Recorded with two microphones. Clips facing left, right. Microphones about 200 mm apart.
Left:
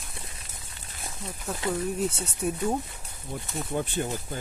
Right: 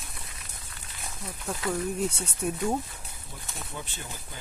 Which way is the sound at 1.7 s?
Centre (ahead or behind).